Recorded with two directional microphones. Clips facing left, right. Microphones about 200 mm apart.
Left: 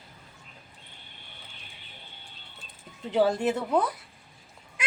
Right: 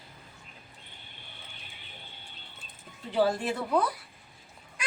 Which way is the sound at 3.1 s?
20° left (ahead or behind).